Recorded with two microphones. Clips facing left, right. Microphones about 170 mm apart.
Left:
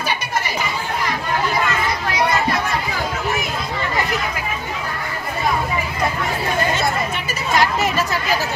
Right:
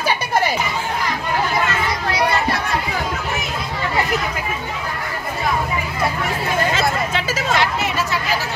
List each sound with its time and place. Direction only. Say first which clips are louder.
6.7 s hubbub: right 1 dB; 90° right